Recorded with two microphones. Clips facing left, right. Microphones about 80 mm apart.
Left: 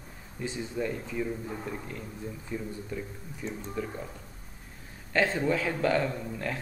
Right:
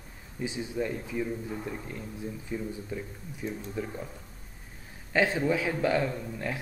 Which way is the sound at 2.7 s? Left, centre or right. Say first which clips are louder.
Even; centre.